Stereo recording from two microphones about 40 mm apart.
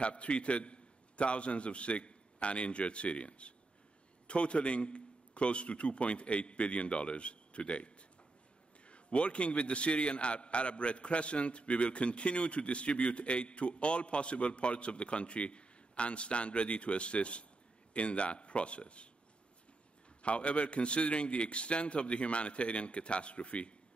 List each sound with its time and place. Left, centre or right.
0.0 s a man's voice: left
20.2 s a man's voice: left